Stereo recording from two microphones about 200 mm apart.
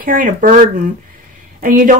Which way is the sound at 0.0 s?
45° right (ahead or behind).